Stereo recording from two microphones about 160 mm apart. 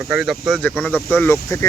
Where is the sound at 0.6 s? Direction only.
10° left (ahead or behind).